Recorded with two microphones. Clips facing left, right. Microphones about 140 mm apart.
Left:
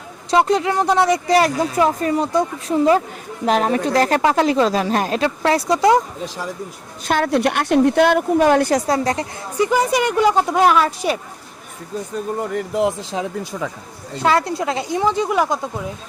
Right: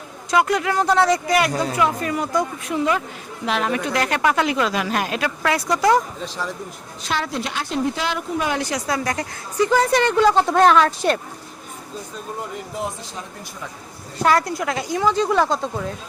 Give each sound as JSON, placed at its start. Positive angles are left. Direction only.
{"t": 0.3, "sound": "a woman's voice", "side_deg": 25}
{"t": 1.3, "sound": "speech", "side_deg": 35}
{"t": 7.0, "sound": "a woman's voice", "side_deg": 50}
{"t": 8.9, "sound": "speech", "side_deg": 30}
{"t": 9.6, "sound": "speech", "side_deg": 15}
{"t": 12.4, "sound": "speech", "side_deg": 70}
{"t": 14.2, "sound": "a woman's voice", "side_deg": 25}